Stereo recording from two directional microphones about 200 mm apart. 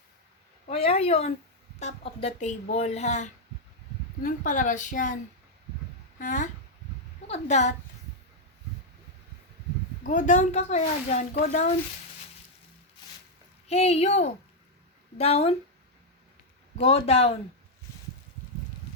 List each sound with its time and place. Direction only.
0.7 s speech: 30° left (ahead or behind)
6.1 s speech: 40° left (ahead or behind)
10.0 s speech: 40° left (ahead or behind)
13.7 s speech: 30° left (ahead or behind)
16.7 s speech: 30° left (ahead or behind)